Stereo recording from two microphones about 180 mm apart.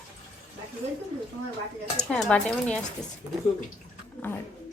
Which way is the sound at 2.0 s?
5° left (ahead or behind).